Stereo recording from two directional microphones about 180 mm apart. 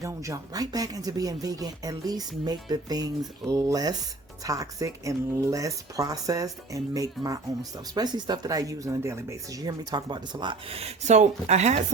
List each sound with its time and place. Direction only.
0.0 s speech: 20° right (ahead or behind); by 11.8 s 40° right (ahead or behind)